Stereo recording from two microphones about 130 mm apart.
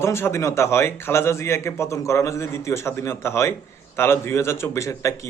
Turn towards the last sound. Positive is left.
turn(degrees=25)  # may be behind; listen again after turning